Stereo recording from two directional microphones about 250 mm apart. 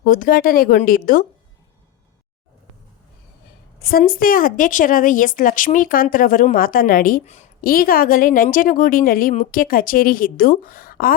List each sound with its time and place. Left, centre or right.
0.0 s a woman's voice: left
3.8 s a woman's voice: left